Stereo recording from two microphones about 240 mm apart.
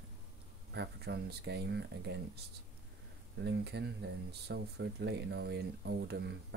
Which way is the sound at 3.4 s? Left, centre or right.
Right.